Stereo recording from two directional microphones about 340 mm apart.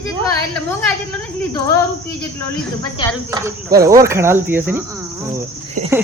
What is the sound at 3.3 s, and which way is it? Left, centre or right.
Speech, centre.